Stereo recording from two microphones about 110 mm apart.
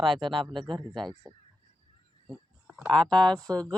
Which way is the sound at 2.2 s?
5° right (ahead or behind).